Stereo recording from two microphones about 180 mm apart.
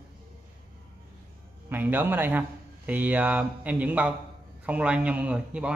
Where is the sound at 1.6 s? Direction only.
10° right (ahead or behind).